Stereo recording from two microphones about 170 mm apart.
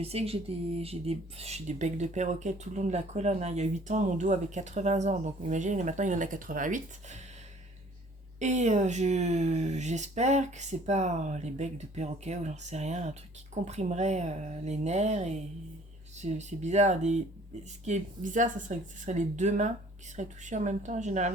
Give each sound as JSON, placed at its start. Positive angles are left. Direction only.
{"t": 0.0, "sound": "speech", "side_deg": -35}
{"t": 8.4, "sound": "speech", "side_deg": -45}